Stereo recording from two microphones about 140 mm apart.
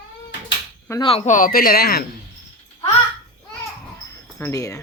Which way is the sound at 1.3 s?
85° left.